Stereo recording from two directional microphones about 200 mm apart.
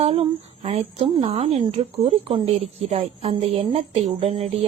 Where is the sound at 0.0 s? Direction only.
30° right (ahead or behind).